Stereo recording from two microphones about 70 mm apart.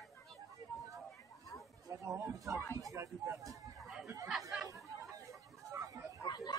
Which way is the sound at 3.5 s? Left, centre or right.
Centre.